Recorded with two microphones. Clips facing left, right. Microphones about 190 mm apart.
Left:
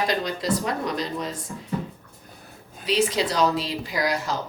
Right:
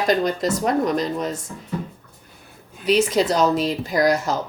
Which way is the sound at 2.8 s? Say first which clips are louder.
Right 5 dB; 45° right (ahead or behind).